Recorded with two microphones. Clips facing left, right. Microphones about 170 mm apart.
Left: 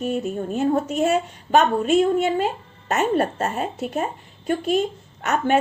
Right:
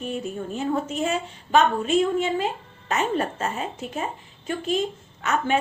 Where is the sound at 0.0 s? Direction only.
40° left (ahead or behind).